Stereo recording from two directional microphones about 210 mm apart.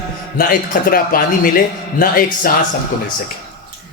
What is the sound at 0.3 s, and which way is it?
A man's voice, 45° left (ahead or behind).